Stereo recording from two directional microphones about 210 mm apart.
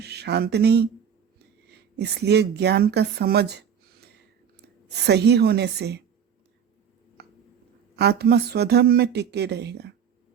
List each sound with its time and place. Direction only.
0.0 s speech: 50° right (ahead or behind)
2.0 s speech: 50° right (ahead or behind)
5.0 s speech: 50° right (ahead or behind)
7.9 s speech: 50° right (ahead or behind)